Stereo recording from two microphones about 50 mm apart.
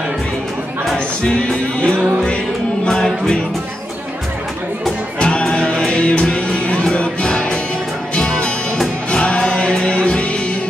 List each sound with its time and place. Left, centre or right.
0.9 s music: left
5.2 s music: centre